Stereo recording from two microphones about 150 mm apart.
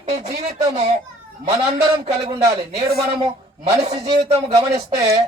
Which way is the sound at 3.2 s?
45° right (ahead or behind).